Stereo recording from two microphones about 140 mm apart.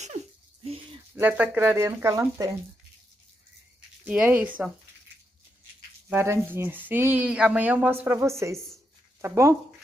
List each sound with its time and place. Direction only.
1.1 s speech: 15° right (ahead or behind)
4.0 s speech: 10° right (ahead or behind)
6.0 s speech: 15° right (ahead or behind)